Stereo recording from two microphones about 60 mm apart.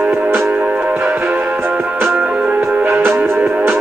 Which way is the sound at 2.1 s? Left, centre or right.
Right.